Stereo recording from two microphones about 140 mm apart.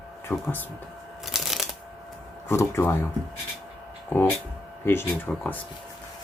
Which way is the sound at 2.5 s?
15° left (ahead or behind).